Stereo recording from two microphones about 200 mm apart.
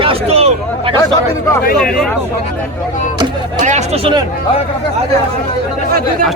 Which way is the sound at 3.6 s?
35° right (ahead or behind).